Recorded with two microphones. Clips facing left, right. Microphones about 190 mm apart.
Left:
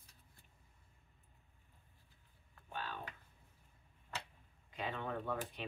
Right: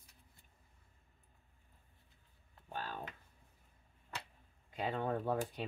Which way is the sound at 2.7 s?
40° right (ahead or behind).